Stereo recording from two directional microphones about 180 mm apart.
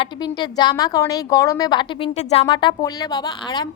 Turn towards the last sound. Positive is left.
turn(degrees=25)  # may be behind; listen again after turning